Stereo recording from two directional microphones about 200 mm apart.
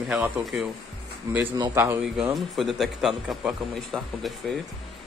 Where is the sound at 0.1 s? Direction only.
5° right (ahead or behind).